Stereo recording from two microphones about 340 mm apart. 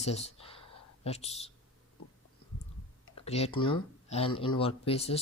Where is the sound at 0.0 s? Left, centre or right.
Centre.